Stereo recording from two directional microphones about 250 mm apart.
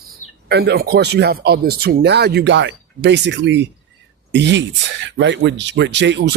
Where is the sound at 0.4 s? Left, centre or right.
Right.